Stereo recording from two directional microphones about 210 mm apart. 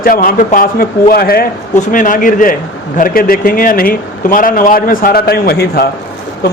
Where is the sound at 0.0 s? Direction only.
45° left (ahead or behind).